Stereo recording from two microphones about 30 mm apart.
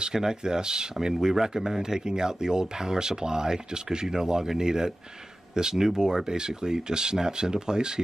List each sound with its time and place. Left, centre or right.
0.0 s speech: right